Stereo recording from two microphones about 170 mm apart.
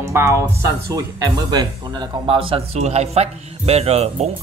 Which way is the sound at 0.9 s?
20° right (ahead or behind).